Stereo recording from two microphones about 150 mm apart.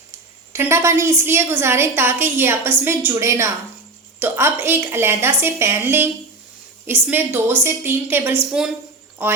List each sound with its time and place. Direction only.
0.5 s a woman's voice: 15° right (ahead or behind)